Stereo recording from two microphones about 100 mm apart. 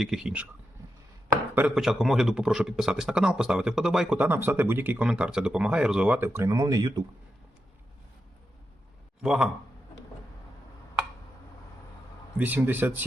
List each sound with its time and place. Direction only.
0.0 s speech: 5° right (ahead or behind)
1.7 s speech: 5° right (ahead or behind)
4.2 s speech: 20° right (ahead or behind)
5.0 s speech: 10° right (ahead or behind)
6.1 s speech: 25° right (ahead or behind)
6.5 s speech: 40° right (ahead or behind)
9.2 s speech: 5° right (ahead or behind)
12.4 s speech: 15° right (ahead or behind)